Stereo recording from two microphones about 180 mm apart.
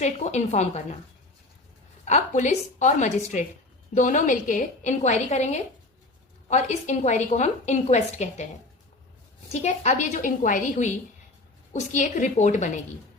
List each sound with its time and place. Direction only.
0.0 s a woman's voice: 40° left (ahead or behind)
2.0 s a woman's voice: 40° left (ahead or behind)
9.5 s a woman's voice: 40° left (ahead or behind)